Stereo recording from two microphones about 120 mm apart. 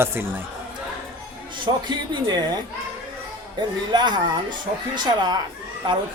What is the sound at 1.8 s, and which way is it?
Speech, 40° right (ahead or behind).